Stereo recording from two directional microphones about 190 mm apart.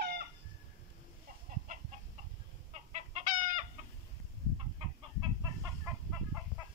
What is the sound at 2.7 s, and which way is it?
Chicken, 35° right (ahead or behind).